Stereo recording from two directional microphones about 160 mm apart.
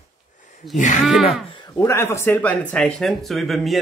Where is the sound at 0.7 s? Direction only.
50° left (ahead or behind).